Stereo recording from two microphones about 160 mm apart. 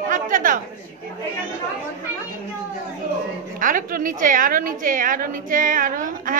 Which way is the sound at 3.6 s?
60° right (ahead or behind).